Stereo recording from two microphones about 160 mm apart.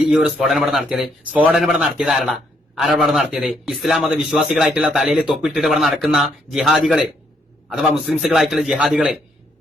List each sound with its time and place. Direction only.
0.0 s a man's voice: centre (ahead or behind)